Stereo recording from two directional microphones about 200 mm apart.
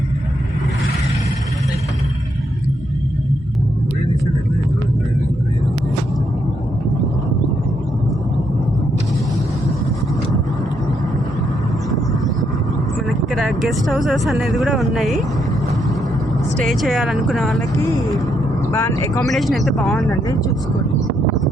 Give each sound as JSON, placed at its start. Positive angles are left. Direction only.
{"t": 13.3, "sound": "speech", "side_deg": 0}
{"t": 16.6, "sound": "speech", "side_deg": 0}
{"t": 18.7, "sound": "speech", "side_deg": 15}
{"t": 19.3, "sound": "speech", "side_deg": 0}